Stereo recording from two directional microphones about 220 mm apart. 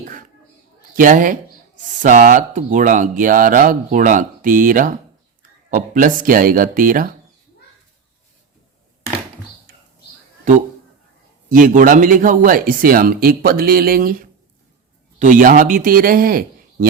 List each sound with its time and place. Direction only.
0.0 s a sound: 35° right (ahead or behind)
0.9 s speech: 35° right (ahead or behind)
11.5 s speech: 35° right (ahead or behind)